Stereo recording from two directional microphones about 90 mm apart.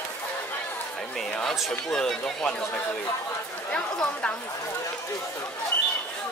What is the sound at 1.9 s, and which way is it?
Speech, 5° left (ahead or behind).